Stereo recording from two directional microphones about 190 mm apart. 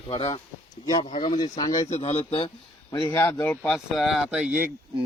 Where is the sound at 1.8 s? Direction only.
35° left (ahead or behind).